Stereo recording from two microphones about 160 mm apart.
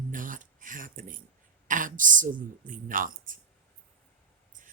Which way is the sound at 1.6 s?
55° right (ahead or behind).